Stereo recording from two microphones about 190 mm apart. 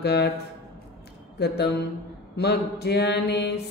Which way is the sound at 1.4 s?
60° left (ahead or behind).